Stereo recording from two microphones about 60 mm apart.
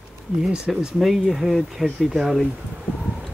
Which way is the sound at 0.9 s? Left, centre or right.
Centre.